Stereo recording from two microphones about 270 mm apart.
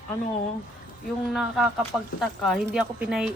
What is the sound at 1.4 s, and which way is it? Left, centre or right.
Speech, centre.